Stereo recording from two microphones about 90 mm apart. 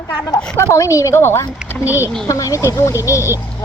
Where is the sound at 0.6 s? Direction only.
35° left (ahead or behind).